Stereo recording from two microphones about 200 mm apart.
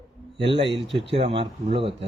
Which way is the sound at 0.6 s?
25° right (ahead or behind).